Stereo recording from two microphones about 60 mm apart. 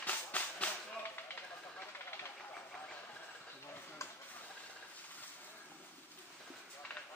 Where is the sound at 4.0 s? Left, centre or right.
Left.